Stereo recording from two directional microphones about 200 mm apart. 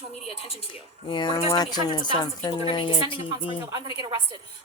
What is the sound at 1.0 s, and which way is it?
A woman's voice, 25° left (ahead or behind).